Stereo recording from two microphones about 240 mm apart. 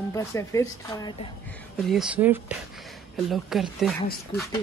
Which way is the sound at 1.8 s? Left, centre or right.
Centre.